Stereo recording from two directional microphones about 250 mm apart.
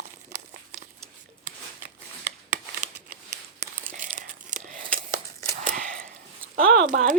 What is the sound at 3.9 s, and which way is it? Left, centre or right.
Tearing, right.